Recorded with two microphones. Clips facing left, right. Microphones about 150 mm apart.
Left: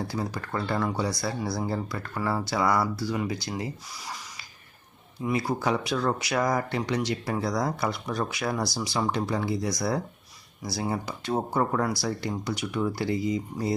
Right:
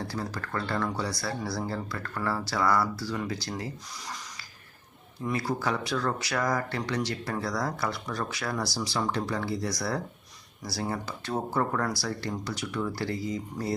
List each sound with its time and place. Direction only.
0.0 s speech: 15° left (ahead or behind)
5.2 s speech: 15° left (ahead or behind)